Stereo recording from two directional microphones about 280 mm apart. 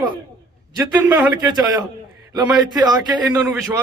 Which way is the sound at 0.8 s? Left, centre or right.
Centre.